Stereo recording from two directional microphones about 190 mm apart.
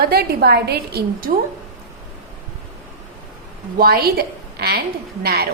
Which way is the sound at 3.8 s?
55° right (ahead or behind).